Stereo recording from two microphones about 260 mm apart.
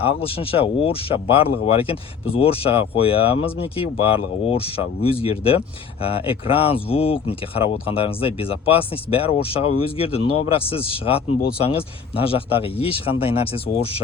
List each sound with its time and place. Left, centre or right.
0.0 s speech: left